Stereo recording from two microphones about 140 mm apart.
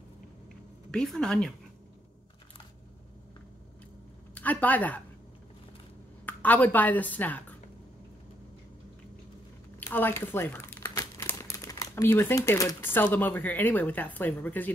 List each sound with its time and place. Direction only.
0.9 s speech: 5° left (ahead or behind)
4.4 s speech: 10° left (ahead or behind)
6.2 s a woman's voice: 10° left (ahead or behind)
9.8 s speech: 15° left (ahead or behind)